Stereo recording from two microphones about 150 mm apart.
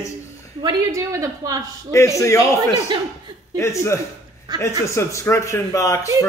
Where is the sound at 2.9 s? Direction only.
30° right (ahead or behind).